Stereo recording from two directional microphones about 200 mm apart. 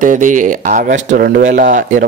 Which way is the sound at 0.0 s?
40° right (ahead or behind).